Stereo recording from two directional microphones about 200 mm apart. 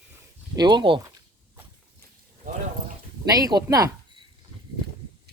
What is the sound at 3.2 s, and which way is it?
Speech, 20° right (ahead or behind).